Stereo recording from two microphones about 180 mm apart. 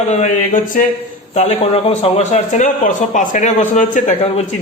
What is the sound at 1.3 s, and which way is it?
A man's voice, 40° left (ahead or behind).